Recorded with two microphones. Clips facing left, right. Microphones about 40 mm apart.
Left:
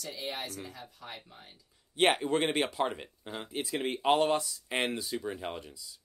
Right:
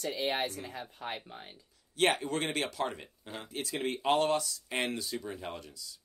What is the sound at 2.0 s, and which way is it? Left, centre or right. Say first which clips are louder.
Speech: left 3 dB; left.